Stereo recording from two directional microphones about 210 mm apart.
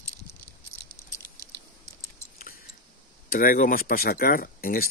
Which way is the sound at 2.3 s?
45° left (ahead or behind).